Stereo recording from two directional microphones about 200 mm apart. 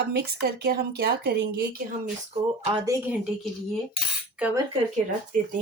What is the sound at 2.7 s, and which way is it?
Speech, 20° right (ahead or behind).